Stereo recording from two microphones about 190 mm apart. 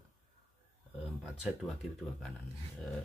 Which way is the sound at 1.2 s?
Centre (ahead or behind).